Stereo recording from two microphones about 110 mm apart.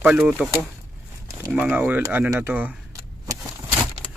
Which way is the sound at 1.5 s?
15° right (ahead or behind).